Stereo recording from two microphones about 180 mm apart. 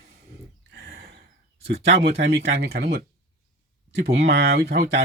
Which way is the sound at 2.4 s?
70° right (ahead or behind).